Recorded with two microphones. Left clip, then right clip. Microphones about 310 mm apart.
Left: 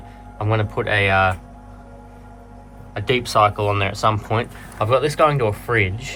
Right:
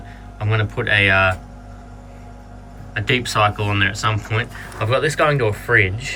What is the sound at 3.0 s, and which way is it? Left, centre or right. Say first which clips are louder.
Speech: left 1 dB; centre.